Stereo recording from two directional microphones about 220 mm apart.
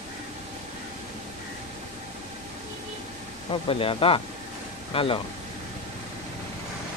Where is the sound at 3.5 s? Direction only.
25° left (ahead or behind).